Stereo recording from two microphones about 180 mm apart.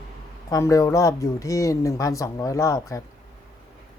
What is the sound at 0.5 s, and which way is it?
Speech, 20° left (ahead or behind).